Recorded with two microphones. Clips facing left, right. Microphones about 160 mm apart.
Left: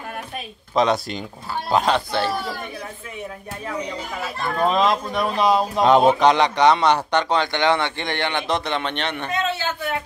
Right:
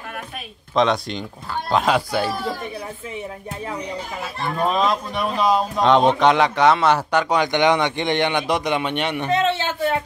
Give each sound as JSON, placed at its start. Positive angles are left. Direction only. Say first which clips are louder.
{"t": 0.7, "sound": "speech", "louder": "even", "side_deg": 5}
{"t": 4.7, "sound": "speech", "louder": "left 1 dB", "side_deg": 0}
{"t": 9.3, "sound": "a sound", "louder": "right 6 dB", "side_deg": -30}